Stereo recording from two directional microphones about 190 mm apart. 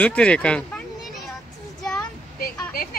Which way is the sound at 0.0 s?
5° left (ahead or behind).